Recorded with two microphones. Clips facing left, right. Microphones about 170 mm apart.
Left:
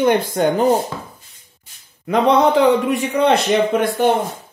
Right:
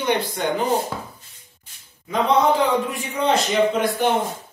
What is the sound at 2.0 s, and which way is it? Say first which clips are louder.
A man's voice: left 4 dB; 65° left (ahead or behind).